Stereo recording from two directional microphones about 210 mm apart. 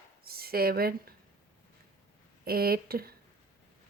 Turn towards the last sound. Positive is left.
turn(degrees=-45)  # may be behind; listen again after turning